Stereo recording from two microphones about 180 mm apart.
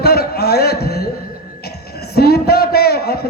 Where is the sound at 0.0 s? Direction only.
60° left (ahead or behind).